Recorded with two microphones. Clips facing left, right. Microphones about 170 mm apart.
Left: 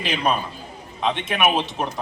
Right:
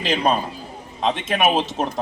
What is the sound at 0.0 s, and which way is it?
A man's voice, 40° right (ahead or behind).